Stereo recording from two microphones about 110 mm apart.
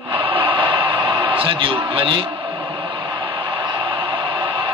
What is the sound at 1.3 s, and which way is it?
Speech, 50° right (ahead or behind).